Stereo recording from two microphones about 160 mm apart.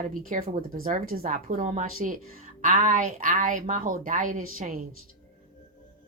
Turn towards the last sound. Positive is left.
turn(degrees=-55)  # may be behind; listen again after turning